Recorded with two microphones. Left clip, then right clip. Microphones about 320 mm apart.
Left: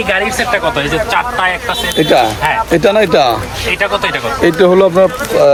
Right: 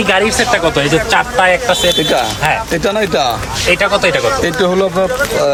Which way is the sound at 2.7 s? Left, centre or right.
Left.